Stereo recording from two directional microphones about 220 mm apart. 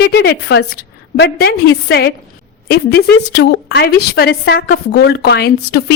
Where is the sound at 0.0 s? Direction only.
45° left (ahead or behind).